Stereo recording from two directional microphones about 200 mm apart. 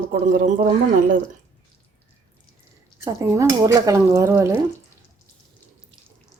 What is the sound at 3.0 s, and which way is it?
Speech, 15° right (ahead or behind).